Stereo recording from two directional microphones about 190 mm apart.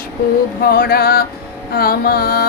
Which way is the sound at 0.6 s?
55° left (ahead or behind).